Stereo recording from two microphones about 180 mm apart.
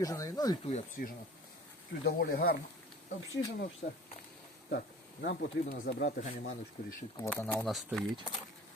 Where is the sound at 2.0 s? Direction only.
60° left (ahead or behind).